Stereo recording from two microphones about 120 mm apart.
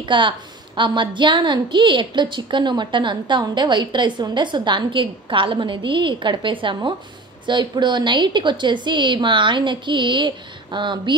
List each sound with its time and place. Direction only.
0.0 s a woman's voice: 40° right (ahead or behind)